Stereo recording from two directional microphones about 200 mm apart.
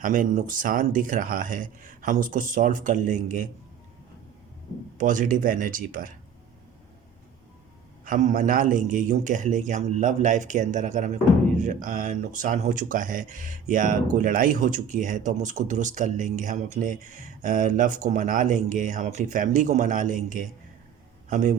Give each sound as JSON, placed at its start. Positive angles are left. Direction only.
{"t": 0.0, "sound": "a man's voice", "side_deg": -40}
{"t": 4.9, "sound": "speech", "side_deg": -40}
{"t": 8.0, "sound": "a man's voice", "side_deg": -40}